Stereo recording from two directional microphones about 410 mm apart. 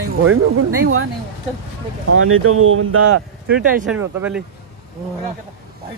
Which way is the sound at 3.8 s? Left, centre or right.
Centre.